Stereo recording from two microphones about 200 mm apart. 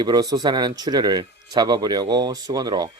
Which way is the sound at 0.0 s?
20° right (ahead or behind).